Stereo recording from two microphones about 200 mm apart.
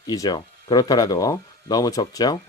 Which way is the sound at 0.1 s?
20° left (ahead or behind).